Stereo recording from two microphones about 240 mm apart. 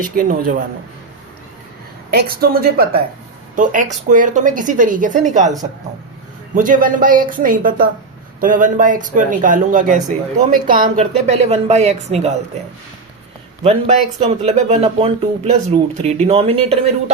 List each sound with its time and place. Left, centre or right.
0.0 s speech: right
2.0 s speech: right
6.5 s speech: right
13.7 s speech: right